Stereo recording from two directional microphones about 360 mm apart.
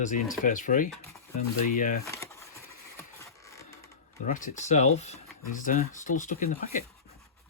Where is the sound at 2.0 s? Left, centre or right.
Centre.